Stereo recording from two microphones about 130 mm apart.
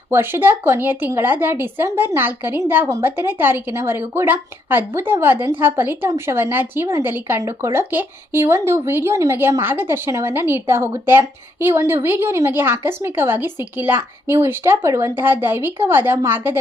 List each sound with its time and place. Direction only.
0.1 s a woman's voice: 15° right (ahead or behind)